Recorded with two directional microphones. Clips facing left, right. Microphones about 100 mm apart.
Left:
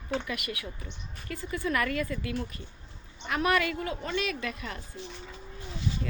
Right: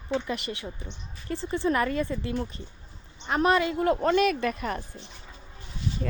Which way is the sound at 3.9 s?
50° right (ahead or behind).